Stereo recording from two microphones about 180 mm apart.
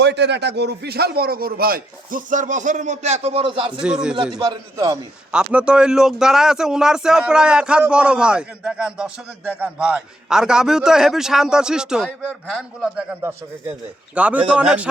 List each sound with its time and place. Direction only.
0.0 s a man's voice: 70° right (ahead or behind); by 3.7 s 30° right (ahead or behind)
3.7 s speech: 5° right (ahead or behind)
4.4 s a man's voice: 20° right (ahead or behind)
5.3 s speech: 5° right (ahead or behind)
13.0 s speech: 10° right (ahead or behind)